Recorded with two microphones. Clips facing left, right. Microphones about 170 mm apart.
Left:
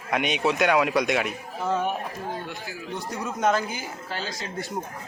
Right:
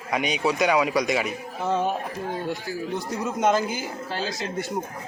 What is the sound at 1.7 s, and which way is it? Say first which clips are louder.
Speech: right 2 dB; 25° right (ahead or behind).